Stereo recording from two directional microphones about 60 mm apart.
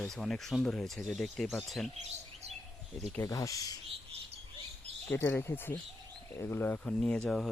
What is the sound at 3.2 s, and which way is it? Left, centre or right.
Speech, left.